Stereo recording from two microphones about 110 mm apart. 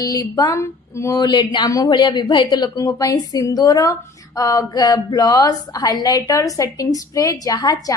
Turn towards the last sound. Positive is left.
turn(degrees=35)  # may be behind; listen again after turning